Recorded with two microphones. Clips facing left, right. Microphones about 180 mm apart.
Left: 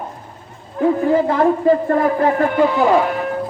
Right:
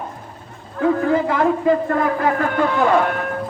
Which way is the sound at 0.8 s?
20° left (ahead or behind).